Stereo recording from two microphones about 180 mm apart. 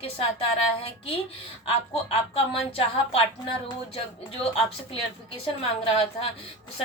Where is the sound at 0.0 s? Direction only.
30° left (ahead or behind).